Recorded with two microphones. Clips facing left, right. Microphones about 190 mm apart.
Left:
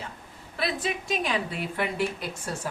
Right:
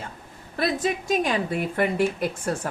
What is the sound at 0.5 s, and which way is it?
Speech, 45° right (ahead or behind).